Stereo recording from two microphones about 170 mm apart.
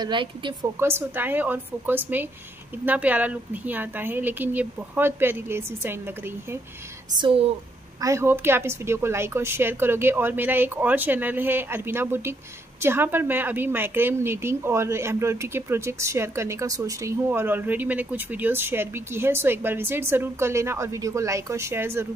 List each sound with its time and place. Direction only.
0.0 s speech: 30° right (ahead or behind)
0.7 s speech: 15° right (ahead or behind)
7.2 s speech: 30° right (ahead or behind)
8.0 s speech: 15° right (ahead or behind)